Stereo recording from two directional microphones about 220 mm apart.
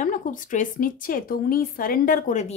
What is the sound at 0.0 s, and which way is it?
Speech, 35° left (ahead or behind).